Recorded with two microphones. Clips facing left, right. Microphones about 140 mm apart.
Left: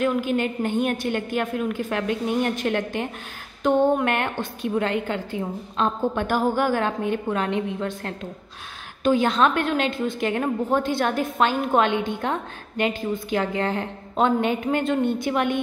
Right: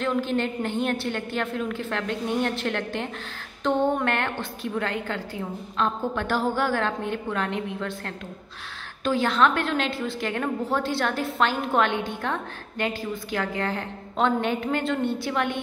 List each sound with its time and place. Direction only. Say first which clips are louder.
0.0 s a woman's voice: left 3 dB; 10° left (ahead or behind)